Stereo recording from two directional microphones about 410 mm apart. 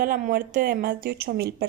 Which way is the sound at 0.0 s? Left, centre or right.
Centre.